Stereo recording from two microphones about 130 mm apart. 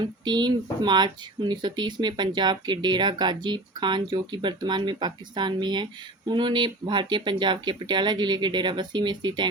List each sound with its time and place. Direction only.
0.0 s speech: 35° right (ahead or behind)